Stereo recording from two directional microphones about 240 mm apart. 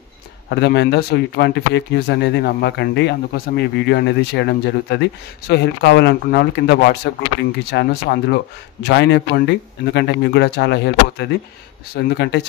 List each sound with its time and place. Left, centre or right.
0.5 s a man's voice: left